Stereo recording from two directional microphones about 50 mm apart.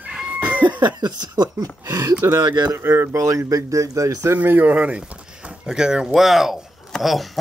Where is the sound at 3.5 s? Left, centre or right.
Right.